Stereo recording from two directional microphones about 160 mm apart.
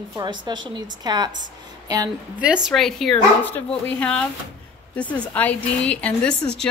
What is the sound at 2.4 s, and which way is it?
A woman's voice, 5° right (ahead or behind).